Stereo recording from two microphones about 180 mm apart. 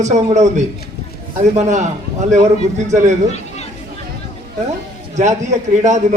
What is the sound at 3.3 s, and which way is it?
Chatter, 40° left (ahead or behind).